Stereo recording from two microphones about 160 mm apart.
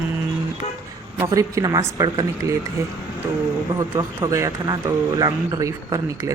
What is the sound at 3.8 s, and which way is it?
A man's voice, 20° right (ahead or behind).